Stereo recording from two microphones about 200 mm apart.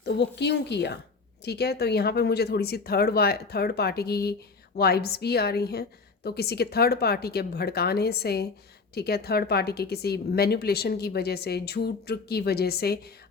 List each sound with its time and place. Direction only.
0.0 s a woman's voice: 60° left (ahead or behind)